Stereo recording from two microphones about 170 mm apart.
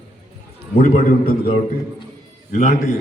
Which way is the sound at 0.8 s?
55° left (ahead or behind).